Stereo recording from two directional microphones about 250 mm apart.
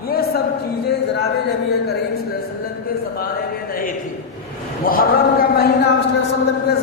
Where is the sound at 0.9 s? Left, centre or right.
Left.